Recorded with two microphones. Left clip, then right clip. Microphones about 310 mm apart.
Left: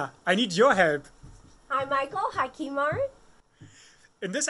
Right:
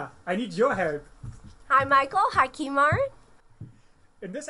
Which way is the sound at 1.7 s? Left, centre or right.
Right.